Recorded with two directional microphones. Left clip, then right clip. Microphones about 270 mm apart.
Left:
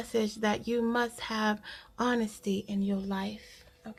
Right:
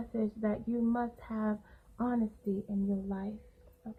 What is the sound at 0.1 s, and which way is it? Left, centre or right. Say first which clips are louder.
Speech: left 6 dB; left.